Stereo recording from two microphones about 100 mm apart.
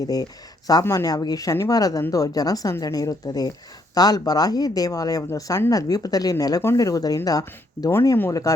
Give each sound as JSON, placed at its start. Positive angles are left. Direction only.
{"t": 0.0, "sound": "speech", "side_deg": 40}